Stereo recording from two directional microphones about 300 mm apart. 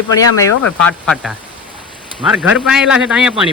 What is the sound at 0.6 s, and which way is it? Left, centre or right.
Speech, centre.